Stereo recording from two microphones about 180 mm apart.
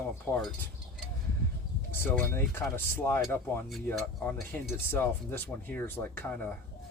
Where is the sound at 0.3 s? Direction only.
15° left (ahead or behind).